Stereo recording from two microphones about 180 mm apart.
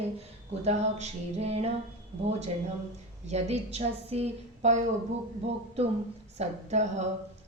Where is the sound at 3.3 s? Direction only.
40° right (ahead or behind).